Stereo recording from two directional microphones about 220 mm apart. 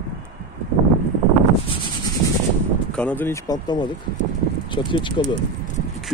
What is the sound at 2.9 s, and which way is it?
Speech, 10° left (ahead or behind).